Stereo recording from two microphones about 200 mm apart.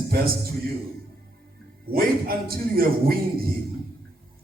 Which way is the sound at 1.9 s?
50° right (ahead or behind).